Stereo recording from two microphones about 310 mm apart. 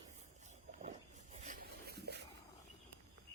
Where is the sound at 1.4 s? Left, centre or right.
Right.